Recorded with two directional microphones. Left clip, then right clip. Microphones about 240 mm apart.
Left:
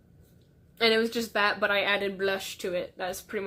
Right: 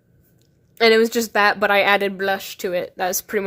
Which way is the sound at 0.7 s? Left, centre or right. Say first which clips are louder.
Right 9 dB; right.